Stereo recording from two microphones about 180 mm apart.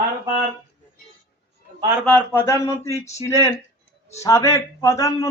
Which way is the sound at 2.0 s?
10° left (ahead or behind).